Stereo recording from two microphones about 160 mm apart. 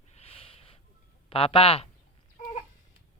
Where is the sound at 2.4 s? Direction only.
45° left (ahead or behind).